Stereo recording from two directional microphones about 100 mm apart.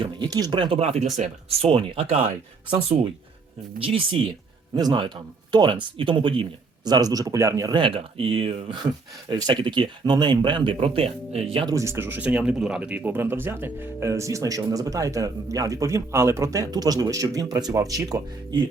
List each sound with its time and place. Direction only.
0.0 s speech: 45° right (ahead or behind)
0.8 s speech: 90° right
1.5 s speech: 75° right (ahead or behind)
2.6 s speech: 55° right (ahead or behind)
4.7 s speech: 45° right (ahead or behind)
6.8 s speech: 40° right (ahead or behind)
7.7 s speech: 60° right (ahead or behind); by 11.6 s 85° right
11.7 s speech: 30° right (ahead or behind)
12.3 s speech: 10° right (ahead or behind); by 18.2 s 35° right (ahead or behind)